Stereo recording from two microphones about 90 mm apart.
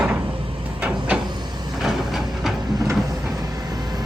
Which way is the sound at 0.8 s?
15° right (ahead or behind).